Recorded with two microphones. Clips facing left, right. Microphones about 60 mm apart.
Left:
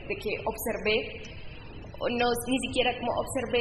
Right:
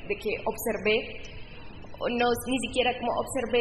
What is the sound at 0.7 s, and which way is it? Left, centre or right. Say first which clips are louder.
Speech: right 2 dB; right.